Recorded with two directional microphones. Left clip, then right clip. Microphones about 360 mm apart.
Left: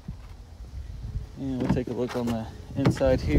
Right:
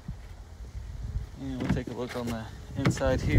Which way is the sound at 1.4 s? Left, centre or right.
Left.